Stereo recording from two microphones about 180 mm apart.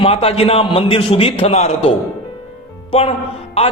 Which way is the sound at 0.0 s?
30° left (ahead or behind).